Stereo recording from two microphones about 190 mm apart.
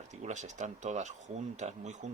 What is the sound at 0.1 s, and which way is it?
Speech, 40° right (ahead or behind).